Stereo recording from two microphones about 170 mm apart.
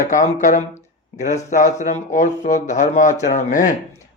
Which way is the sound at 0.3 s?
45° left (ahead or behind).